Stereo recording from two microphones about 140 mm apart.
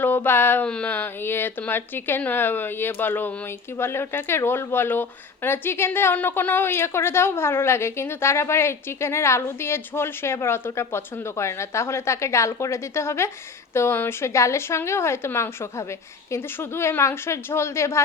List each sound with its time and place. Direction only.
0.0 s a woman's voice: 15° left (ahead or behind)